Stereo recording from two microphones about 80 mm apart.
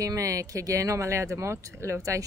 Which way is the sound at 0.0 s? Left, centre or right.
Right.